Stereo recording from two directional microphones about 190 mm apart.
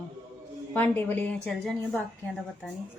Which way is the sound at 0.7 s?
10° left (ahead or behind).